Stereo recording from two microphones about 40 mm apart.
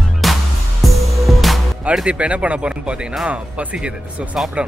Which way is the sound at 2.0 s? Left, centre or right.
Right.